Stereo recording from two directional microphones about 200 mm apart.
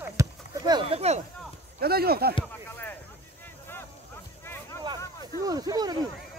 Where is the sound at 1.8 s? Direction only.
50° right (ahead or behind).